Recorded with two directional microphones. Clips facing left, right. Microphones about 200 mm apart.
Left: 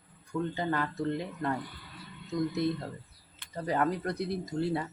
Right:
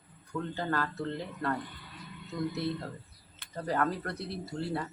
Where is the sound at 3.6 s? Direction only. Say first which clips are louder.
Left 2 dB; 15° left (ahead or behind).